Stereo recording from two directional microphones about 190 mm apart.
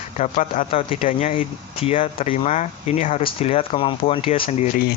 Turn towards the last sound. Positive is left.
turn(degrees=40)  # may be behind; listen again after turning